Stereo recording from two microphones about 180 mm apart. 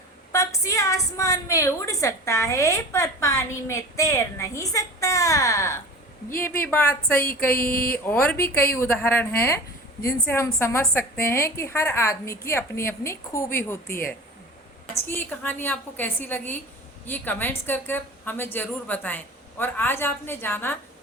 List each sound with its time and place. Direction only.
0.3 s a woman's voice: 15° left (ahead or behind)